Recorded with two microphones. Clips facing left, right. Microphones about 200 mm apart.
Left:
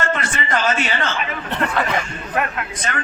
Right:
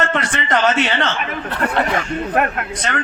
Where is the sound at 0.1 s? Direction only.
70° right (ahead or behind).